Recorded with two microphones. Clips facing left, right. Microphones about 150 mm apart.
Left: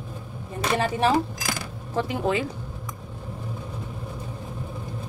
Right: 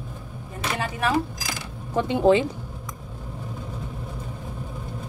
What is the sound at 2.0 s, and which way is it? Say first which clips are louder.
Speech: right 6 dB; 25° right (ahead or behind).